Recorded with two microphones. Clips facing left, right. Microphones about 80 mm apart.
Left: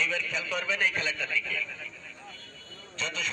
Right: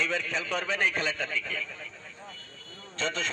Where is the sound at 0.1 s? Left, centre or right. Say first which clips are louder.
Right 2 dB; right.